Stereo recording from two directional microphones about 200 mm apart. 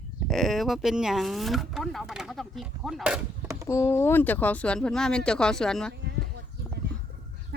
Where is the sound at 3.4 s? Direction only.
15° right (ahead or behind).